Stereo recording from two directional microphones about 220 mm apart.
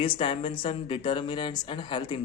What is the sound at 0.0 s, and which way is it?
A man's voice, 25° left (ahead or behind).